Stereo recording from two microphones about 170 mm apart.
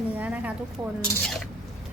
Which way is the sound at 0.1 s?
10° right (ahead or behind).